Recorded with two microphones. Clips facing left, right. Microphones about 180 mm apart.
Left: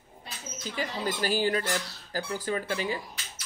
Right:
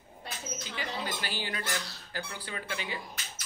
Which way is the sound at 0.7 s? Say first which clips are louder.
Left 6 dB; 40° left (ahead or behind).